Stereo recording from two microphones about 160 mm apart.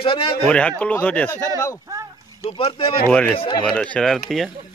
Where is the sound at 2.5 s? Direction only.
35° left (ahead or behind).